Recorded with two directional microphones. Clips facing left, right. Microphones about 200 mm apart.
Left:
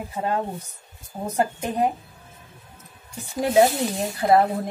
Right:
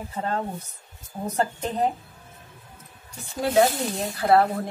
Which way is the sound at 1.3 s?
15° left (ahead or behind).